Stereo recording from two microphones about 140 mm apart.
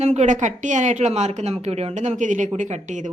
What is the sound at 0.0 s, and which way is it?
A woman's voice, 50° right (ahead or behind).